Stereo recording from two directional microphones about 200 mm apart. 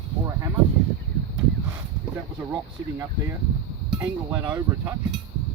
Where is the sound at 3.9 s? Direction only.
15° right (ahead or behind).